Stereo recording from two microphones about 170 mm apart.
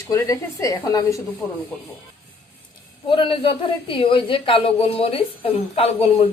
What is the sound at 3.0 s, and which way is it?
A woman's voice, 30° left (ahead or behind).